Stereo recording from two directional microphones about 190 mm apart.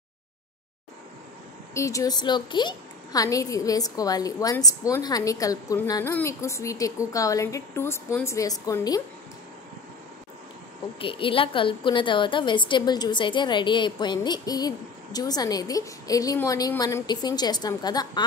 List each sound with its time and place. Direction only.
1.7 s a woman's voice: 15° left (ahead or behind)
11.0 s a woman's voice: 25° left (ahead or behind)